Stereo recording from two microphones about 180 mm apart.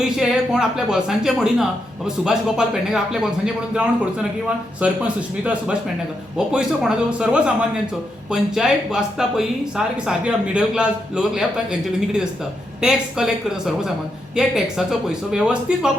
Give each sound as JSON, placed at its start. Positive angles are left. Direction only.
{"t": 0.2, "sound": "speech", "side_deg": -5}